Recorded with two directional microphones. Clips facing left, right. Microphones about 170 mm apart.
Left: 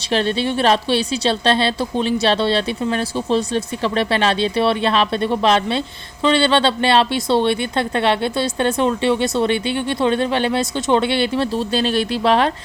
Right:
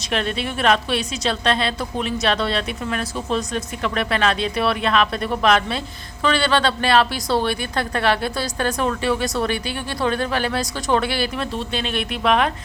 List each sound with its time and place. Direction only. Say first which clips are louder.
0.1 s speech: left 5 dB; 30° left (ahead or behind)